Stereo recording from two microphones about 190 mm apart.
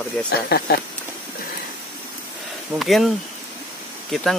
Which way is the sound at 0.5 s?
55° left (ahead or behind).